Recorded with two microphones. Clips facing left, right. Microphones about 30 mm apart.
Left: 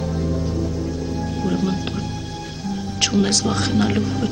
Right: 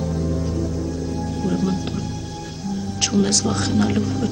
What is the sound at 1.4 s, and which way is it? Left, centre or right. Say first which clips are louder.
Speech: even; left.